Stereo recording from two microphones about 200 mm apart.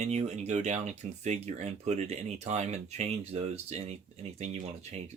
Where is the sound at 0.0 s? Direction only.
35° right (ahead or behind).